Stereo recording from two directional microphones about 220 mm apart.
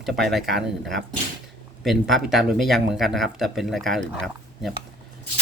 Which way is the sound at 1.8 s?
Centre (ahead or behind).